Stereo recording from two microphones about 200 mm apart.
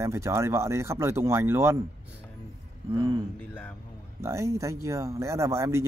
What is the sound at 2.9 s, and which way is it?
Speech, 20° right (ahead or behind).